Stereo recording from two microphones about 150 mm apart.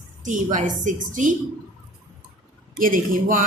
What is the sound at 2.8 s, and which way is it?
Speech, 65° right (ahead or behind).